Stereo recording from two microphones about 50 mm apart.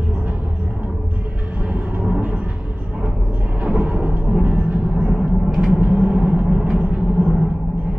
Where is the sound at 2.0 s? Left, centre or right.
Right.